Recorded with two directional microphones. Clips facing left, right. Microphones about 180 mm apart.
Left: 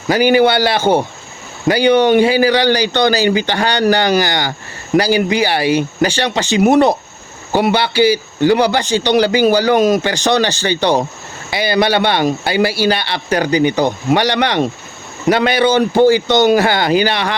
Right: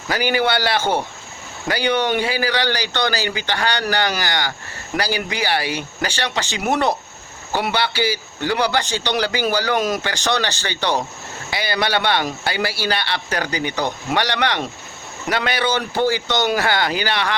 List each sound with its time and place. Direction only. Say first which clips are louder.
0.1 s a man's voice: left 8 dB; 20° left (ahead or behind)